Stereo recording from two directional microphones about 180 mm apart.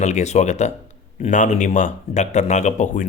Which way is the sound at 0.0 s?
40° left (ahead or behind).